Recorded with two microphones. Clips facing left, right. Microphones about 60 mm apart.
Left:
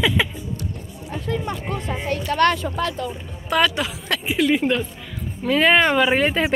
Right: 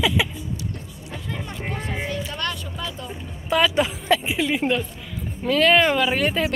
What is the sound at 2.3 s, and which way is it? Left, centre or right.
Speech, left.